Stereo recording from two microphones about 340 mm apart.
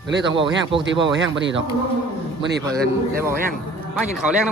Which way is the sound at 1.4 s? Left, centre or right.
Right.